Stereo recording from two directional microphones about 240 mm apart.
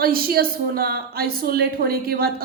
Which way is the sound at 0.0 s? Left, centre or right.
Right.